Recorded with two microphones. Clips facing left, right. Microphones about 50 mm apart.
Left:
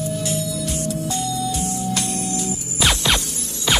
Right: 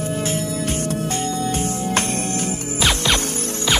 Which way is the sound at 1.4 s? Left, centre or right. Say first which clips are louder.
Right 2 dB; right.